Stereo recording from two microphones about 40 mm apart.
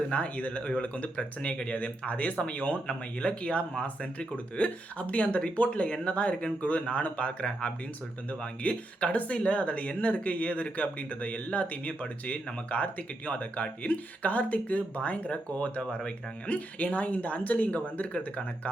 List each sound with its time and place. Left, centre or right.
0.1 s speech: left